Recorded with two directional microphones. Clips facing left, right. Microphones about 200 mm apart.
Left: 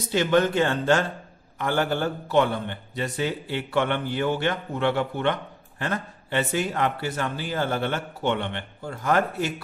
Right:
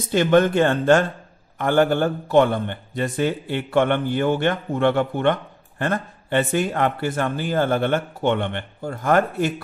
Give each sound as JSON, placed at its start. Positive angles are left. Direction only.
{"t": 0.1, "sound": "a man's voice", "side_deg": -50}